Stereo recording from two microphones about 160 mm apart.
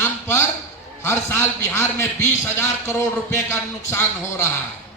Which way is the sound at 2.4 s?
15° left (ahead or behind).